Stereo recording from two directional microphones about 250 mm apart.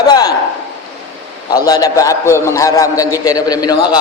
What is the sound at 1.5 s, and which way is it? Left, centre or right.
A man's voice, centre.